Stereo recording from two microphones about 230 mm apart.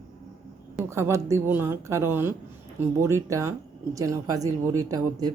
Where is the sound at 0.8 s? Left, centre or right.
Centre.